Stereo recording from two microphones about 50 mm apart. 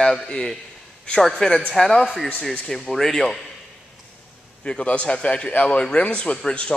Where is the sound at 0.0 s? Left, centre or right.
Centre.